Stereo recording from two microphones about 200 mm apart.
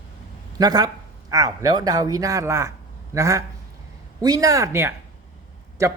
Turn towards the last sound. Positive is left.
turn(degrees=-15)  # may be behind; listen again after turning